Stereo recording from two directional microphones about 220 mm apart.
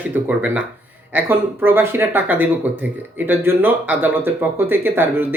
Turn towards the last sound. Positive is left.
turn(degrees=-10)  # may be behind; listen again after turning